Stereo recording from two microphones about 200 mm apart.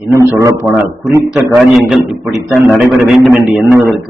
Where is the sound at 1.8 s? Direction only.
Centre (ahead or behind).